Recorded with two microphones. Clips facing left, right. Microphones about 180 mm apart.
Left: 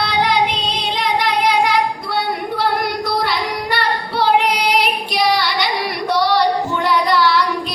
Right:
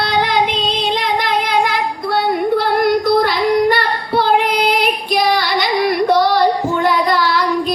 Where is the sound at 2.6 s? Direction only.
50° right (ahead or behind).